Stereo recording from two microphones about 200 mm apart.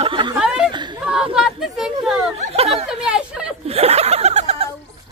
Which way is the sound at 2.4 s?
30° right (ahead or behind).